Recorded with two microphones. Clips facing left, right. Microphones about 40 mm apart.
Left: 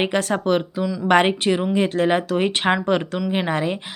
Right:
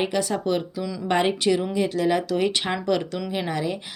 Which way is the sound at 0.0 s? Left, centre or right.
Left.